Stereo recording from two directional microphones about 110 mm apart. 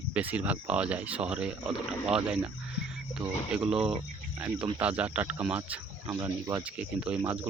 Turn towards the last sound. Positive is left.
turn(degrees=-10)  # may be behind; listen again after turning